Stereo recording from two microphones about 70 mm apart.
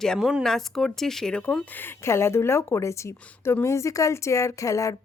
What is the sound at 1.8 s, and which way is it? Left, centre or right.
A woman's voice, left.